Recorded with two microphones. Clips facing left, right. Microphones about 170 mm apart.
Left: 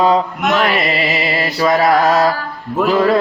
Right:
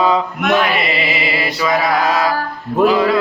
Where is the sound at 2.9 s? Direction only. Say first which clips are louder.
Left 4 dB; 45° left (ahead or behind).